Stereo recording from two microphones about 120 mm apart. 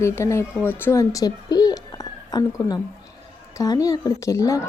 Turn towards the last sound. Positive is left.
turn(degrees=25)  # may be behind; listen again after turning